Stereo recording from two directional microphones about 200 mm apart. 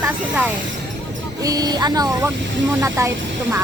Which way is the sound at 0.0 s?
10° right (ahead or behind).